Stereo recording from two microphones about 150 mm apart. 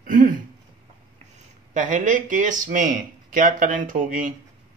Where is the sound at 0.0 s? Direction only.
65° right (ahead or behind).